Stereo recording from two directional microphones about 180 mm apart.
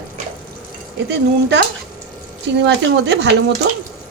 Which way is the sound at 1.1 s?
70° right (ahead or behind).